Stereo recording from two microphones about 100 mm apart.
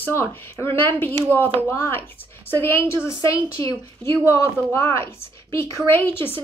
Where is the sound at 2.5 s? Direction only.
20° left (ahead or behind).